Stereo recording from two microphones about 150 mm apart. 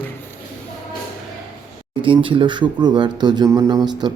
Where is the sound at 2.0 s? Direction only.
35° right (ahead or behind).